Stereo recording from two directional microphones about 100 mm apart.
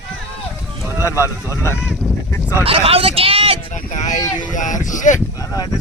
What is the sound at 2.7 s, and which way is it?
Speech, 70° right (ahead or behind).